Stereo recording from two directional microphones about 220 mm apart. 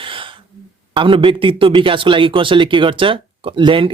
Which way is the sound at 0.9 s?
25° right (ahead or behind).